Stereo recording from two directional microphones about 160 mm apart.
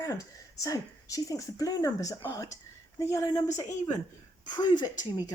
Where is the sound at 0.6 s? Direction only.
20° left (ahead or behind).